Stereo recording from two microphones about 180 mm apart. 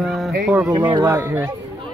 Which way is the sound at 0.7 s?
25° right (ahead or behind).